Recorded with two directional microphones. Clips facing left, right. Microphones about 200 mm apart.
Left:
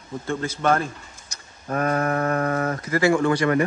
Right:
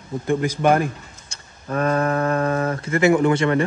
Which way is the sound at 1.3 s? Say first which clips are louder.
Right 1 dB; 30° right (ahead or behind).